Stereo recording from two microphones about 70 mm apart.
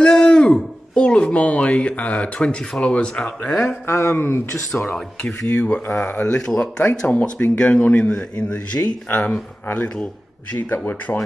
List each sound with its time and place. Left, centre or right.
0.0 s speech: centre
3.8 s speech: left
4.8 s speech: centre
5.5 s speech: left
11.1 s speech: left